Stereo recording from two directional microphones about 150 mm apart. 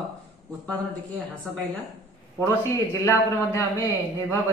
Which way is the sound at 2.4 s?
20° left (ahead or behind).